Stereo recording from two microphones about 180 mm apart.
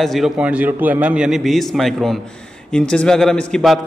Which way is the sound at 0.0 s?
Centre (ahead or behind).